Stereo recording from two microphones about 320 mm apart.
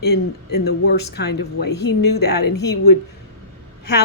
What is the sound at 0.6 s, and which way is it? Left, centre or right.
Speech, left.